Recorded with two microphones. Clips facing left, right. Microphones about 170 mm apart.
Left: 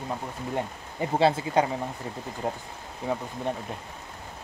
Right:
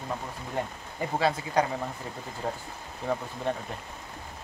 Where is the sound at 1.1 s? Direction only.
30° left (ahead or behind).